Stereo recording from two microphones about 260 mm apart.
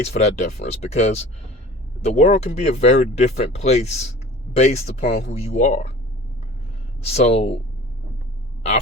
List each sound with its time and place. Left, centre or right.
0.1 s speech: left
7.1 s speech: left